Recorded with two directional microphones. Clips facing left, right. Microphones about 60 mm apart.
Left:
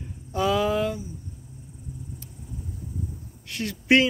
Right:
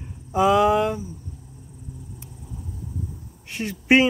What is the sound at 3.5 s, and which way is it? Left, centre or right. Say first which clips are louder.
Speech: right 2 dB; right.